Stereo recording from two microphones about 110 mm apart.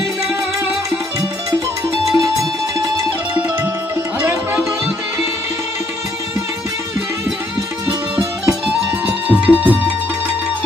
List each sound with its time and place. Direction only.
2.1 s music: 30° right (ahead or behind)
4.2 s music: 10° right (ahead or behind)
8.1 s music: 5° right (ahead or behind)